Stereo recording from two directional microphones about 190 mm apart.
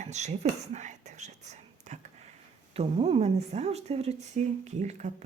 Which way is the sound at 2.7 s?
30° right (ahead or behind).